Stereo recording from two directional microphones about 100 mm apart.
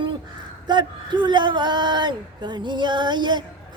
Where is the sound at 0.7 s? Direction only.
50° right (ahead or behind).